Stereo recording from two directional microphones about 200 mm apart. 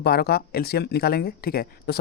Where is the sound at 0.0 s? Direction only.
50° left (ahead or behind).